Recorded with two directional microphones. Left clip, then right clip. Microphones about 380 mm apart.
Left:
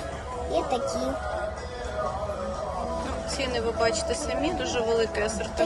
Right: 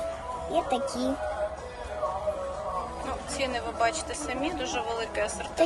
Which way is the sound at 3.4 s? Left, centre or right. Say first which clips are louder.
Left 2 dB; centre.